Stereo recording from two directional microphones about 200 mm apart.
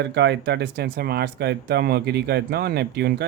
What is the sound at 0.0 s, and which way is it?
Speech, 60° right (ahead or behind).